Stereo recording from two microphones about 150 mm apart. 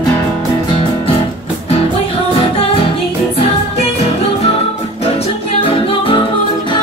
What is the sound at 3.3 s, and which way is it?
Music, 45° left (ahead or behind).